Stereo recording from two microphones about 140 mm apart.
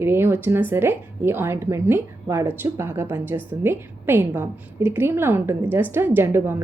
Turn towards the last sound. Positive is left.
turn(degrees=-15)  # may be behind; listen again after turning